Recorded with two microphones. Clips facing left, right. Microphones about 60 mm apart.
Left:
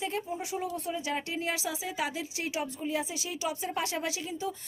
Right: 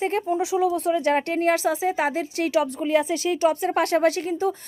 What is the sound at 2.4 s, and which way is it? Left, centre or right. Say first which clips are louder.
Speech: right 12 dB; right.